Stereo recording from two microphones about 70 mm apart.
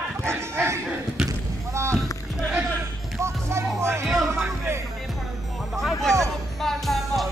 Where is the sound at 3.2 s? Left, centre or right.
Right.